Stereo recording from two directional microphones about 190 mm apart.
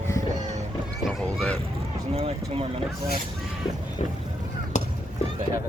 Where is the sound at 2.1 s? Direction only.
30° right (ahead or behind).